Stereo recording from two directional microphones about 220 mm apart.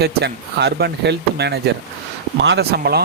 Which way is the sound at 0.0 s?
45° right (ahead or behind).